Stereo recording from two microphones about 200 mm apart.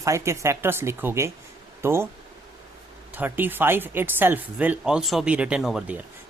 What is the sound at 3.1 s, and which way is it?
Speech, 10° right (ahead or behind).